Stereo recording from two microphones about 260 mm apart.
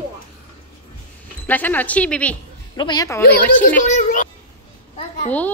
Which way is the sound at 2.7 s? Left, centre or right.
Centre.